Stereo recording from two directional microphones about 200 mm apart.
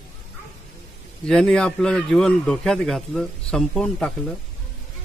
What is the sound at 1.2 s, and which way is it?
A man's voice, 5° left (ahead or behind).